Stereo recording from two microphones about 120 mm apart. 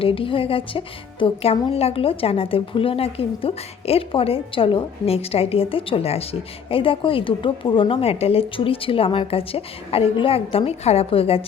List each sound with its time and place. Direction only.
0.0 s speech: 50° left (ahead or behind)